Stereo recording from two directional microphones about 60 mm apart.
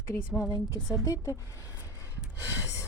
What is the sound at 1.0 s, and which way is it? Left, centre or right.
Speech, left.